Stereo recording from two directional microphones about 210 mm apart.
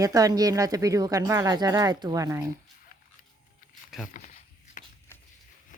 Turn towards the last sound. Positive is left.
turn(degrees=40)  # may be behind; listen again after turning